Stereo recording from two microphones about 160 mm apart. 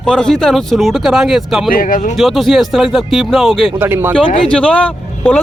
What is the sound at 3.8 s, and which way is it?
Speech, 15° right (ahead or behind).